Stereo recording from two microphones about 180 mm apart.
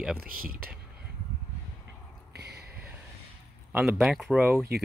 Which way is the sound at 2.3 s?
65° right (ahead or behind).